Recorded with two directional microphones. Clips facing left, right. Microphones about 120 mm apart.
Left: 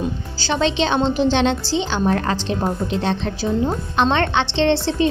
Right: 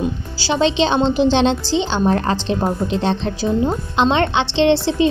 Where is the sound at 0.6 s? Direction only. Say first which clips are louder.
Right 3 dB; 20° right (ahead or behind).